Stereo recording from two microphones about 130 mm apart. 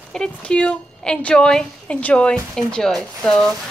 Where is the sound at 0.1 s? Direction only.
5° left (ahead or behind).